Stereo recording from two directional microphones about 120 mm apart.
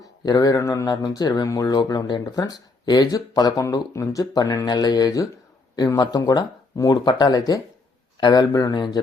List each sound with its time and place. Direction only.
0.0 s speech: 30° left (ahead or behind)